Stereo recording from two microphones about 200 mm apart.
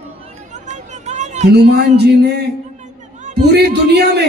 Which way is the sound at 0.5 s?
35° right (ahead or behind).